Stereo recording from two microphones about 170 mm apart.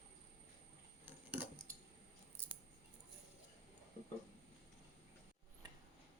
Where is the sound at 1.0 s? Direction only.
10° right (ahead or behind).